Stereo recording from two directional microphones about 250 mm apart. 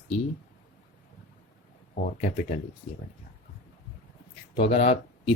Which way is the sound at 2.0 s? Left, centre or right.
Left.